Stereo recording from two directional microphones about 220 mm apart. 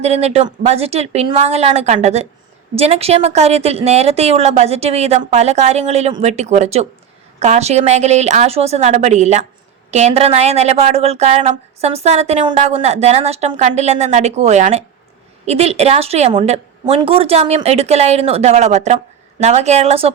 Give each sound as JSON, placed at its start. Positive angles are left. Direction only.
{"t": 0.0, "sound": "a woman's voice", "side_deg": -30}